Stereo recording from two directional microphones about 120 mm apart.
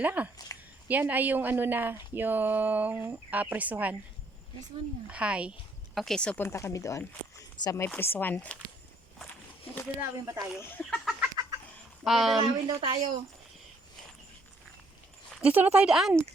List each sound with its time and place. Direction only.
0.0 s speech: 15° right (ahead or behind)
0.5 s a sound: 30° left (ahead or behind)
0.9 s speech: 15° right (ahead or behind)
5.0 s a woman's voice: 10° right (ahead or behind); by 6.4 s 10° left (ahead or behind)
6.4 s speech: 20° left (ahead or behind)
7.9 s speech: 15° left (ahead or behind)
10.0 s speech: 30° right (ahead or behind)
10.6 s speech: 15° left (ahead or behind)
11.4 s chicken: 35° right (ahead or behind)
12.0 s speech: centre (ahead or behind)
12.4 s a woman's voice: 50° right (ahead or behind)
15.4 s speech: 10° right (ahead or behind)